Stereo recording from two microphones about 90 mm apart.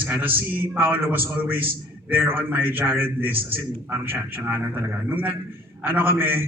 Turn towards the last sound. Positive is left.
turn(degrees=-20)  # may be behind; listen again after turning